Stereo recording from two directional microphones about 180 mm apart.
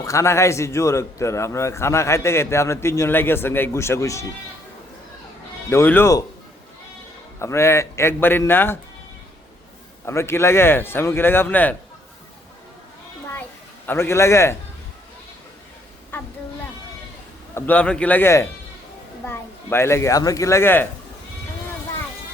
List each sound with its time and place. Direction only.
0.0 s a man's voice: 15° left (ahead or behind)
5.6 s a man's voice: 15° left (ahead or behind)
7.3 s a man's voice: 15° left (ahead or behind)
10.1 s a man's voice: 15° left (ahead or behind)
13.8 s a man's voice: 15° left (ahead or behind)
17.5 s a man's voice: 10° left (ahead or behind)